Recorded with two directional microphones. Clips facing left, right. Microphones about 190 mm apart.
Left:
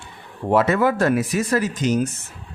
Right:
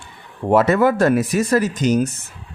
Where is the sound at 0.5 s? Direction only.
45° right (ahead or behind).